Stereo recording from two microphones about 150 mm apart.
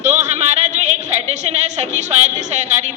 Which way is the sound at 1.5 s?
50° right (ahead or behind).